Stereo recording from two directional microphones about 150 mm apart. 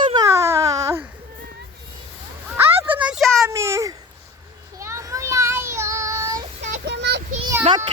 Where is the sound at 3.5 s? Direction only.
20° right (ahead or behind).